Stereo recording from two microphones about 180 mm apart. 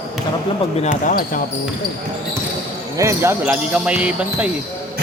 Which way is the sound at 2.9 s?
15° right (ahead or behind).